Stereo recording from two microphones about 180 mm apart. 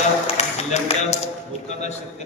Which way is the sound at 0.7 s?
40° left (ahead or behind).